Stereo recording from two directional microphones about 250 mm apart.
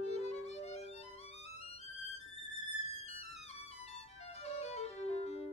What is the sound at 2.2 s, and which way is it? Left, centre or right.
Music, left.